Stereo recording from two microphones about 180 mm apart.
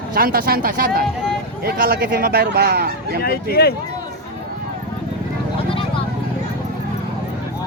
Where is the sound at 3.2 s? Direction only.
60° left (ahead or behind).